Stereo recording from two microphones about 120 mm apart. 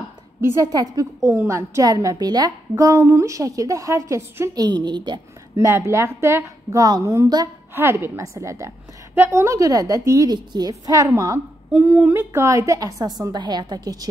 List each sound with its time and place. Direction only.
0.4 s a woman's voice: 20° right (ahead or behind)
0.7 s a woman's voice: 30° right (ahead or behind)
4.6 s a woman's voice: 40° right (ahead or behind)
5.6 s a woman's voice: 25° right (ahead or behind)
11.7 s a woman's voice: 10° right (ahead or behind); by 14.0 s 35° right (ahead or behind)